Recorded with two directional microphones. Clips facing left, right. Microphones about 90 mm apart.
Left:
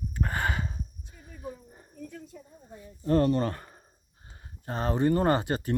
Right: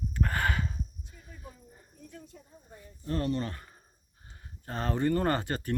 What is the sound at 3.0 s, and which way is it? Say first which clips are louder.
Speech: left 7 dB; 45° left (ahead or behind).